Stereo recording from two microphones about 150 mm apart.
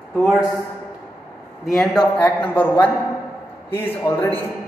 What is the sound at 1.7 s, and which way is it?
A man's voice, 5° left (ahead or behind).